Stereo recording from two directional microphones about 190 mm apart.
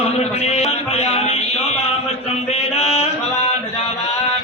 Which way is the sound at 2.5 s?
35° left (ahead or behind).